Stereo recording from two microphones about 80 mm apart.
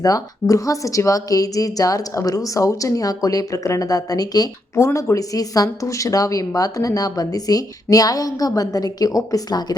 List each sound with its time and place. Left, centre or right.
0.0 s a woman's voice: left